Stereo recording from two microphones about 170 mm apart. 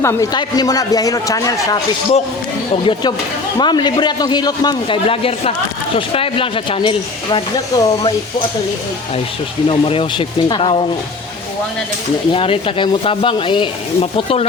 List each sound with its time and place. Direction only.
0.0 s speech: 15° left (ahead or behind)
3.6 s speech: 25° left (ahead or behind)
9.6 s speech: 30° left (ahead or behind)
12.3 s speech: 30° left (ahead or behind)